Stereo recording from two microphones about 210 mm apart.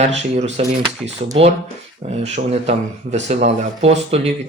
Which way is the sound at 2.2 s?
30° right (ahead or behind).